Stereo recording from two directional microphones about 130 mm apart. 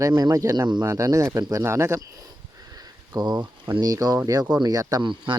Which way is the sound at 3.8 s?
30° right (ahead or behind).